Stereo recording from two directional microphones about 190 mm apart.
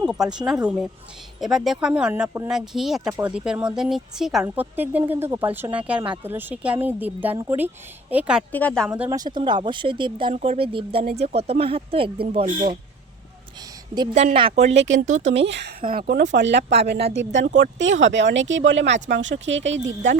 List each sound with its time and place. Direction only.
0.0 s a woman's voice: 5° right (ahead or behind)
8.5 s speech: 5° left (ahead or behind)
9.0 s speech: 20° right (ahead or behind)
14.1 s speech: 40° right (ahead or behind)
14.8 s speech: 80° right
15.0 s speech: 40° right (ahead or behind)
15.4 s speech: 65° right (ahead or behind)
15.8 s speech: 50° right (ahead or behind)
17.2 s speech: 70° right (ahead or behind)